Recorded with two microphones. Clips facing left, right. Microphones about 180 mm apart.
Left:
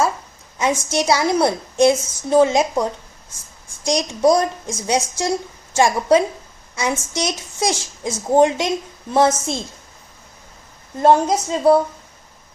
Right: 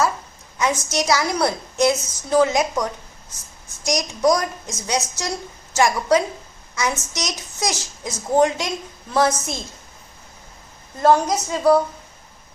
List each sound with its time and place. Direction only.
0.6 s a woman's voice: 25° left (ahead or behind)
10.9 s a woman's voice: 25° left (ahead or behind)